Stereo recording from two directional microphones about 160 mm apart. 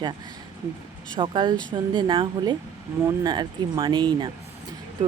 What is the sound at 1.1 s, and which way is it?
Speech, 30° right (ahead or behind).